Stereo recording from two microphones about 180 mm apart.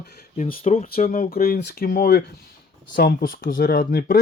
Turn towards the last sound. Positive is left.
turn(degrees=60)  # may be behind; listen again after turning